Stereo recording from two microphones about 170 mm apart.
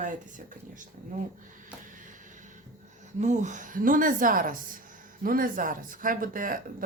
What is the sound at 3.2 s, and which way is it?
A woman's voice, 45° right (ahead or behind).